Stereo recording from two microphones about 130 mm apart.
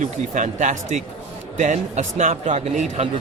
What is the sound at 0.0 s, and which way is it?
A man's voice, 75° right (ahead or behind).